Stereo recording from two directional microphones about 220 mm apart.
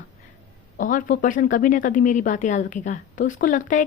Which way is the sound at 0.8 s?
35° left (ahead or behind).